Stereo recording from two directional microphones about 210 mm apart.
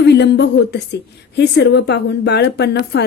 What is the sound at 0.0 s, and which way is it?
A woman's voice, 55° left (ahead or behind).